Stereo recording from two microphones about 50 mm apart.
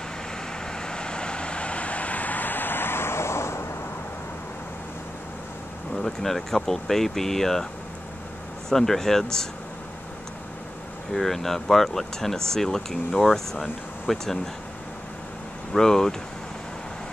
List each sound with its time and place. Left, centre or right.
0.7 s vehicle: centre; by 3.6 s left
6.2 s speech: centre
8.6 s speech: centre
11.1 s speech: centre
15.7 s speech: centre